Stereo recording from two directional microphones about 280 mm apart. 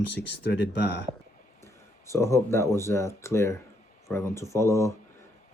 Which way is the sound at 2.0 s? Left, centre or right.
Centre.